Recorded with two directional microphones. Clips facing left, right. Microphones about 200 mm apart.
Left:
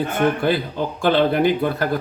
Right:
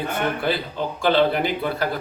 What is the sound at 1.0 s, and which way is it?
Speech, 50° left (ahead or behind).